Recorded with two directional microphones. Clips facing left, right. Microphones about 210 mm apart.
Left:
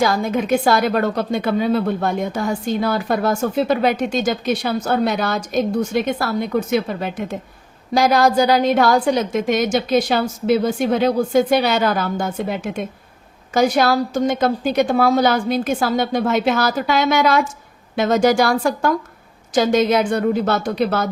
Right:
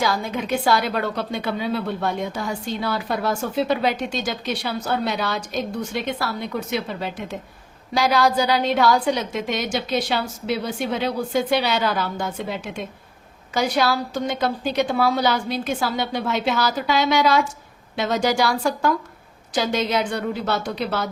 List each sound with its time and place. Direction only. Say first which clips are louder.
0.0 s a woman's voice: left 5 dB; 50° left (ahead or behind)